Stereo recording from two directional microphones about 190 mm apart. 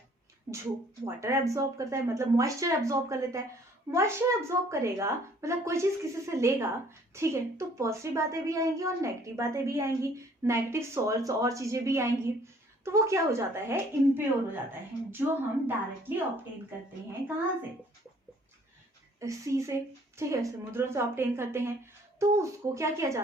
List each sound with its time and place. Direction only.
0.5 s a woman's voice: 15° right (ahead or behind)
15.6 s a woman's voice: 10° right (ahead or behind)
19.2 s a woman's voice: 15° right (ahead or behind)